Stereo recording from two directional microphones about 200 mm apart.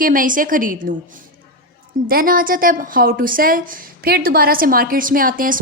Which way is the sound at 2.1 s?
45° right (ahead or behind).